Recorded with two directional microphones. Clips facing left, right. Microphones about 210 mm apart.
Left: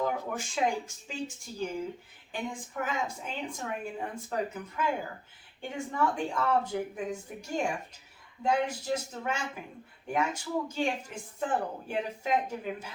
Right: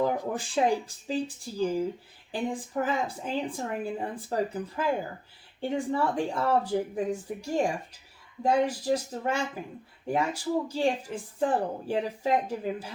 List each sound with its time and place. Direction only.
0.0 s speech: 35° right (ahead or behind)